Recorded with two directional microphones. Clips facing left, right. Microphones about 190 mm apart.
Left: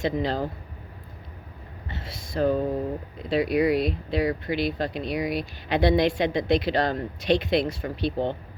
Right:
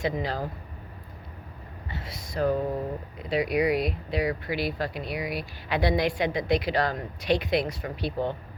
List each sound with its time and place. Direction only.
0.0 s speech: 25° left (ahead or behind)
1.9 s speech: 25° left (ahead or behind)